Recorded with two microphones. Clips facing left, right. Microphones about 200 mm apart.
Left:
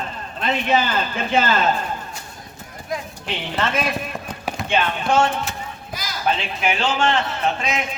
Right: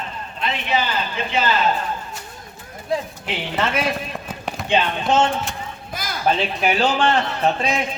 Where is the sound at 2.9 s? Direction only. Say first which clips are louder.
Right 5 dB; 30° right (ahead or behind).